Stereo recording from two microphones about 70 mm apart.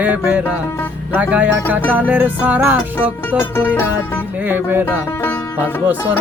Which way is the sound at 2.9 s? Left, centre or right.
Left.